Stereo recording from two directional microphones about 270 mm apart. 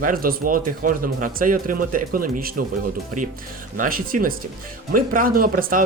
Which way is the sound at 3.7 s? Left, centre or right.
Right.